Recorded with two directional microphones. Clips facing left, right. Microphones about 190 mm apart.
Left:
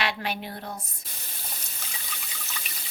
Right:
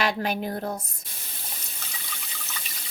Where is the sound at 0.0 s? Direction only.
45° right (ahead or behind).